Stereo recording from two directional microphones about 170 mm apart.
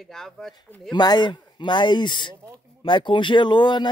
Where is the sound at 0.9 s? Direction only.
25° left (ahead or behind).